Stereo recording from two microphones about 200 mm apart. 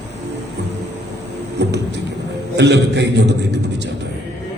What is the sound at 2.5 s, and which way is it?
Speech, 60° right (ahead or behind).